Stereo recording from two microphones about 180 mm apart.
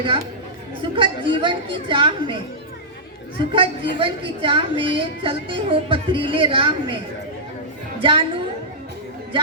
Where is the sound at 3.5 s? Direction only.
30° right (ahead or behind).